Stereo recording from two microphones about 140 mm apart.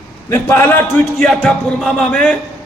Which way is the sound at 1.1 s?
5° left (ahead or behind).